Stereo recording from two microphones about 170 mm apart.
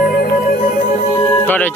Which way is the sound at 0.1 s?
55° left (ahead or behind).